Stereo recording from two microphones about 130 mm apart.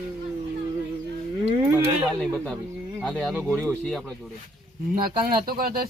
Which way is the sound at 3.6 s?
10° left (ahead or behind).